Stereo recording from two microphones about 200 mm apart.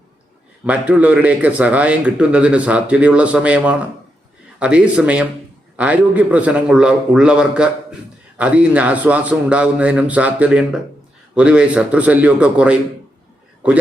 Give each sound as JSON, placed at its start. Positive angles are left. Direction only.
{"t": 0.6, "sound": "a man's voice", "side_deg": -5}